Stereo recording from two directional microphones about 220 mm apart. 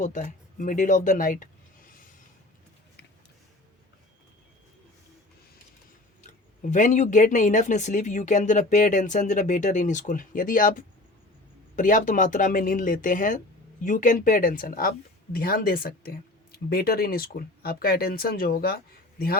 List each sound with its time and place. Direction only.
0.0 s speech: 35° left (ahead or behind)
6.6 s speech: 35° left (ahead or behind)